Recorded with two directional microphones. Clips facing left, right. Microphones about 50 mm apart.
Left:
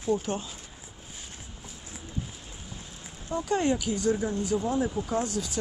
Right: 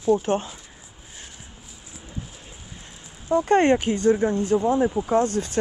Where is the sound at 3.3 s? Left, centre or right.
Right.